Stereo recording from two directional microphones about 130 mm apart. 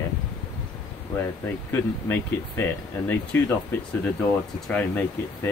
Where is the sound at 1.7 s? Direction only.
15° left (ahead or behind).